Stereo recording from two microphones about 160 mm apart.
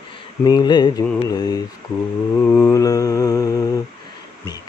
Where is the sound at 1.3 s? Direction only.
25° left (ahead or behind).